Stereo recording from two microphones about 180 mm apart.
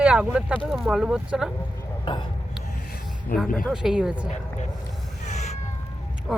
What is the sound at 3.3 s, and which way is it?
Speech, 50° left (ahead or behind).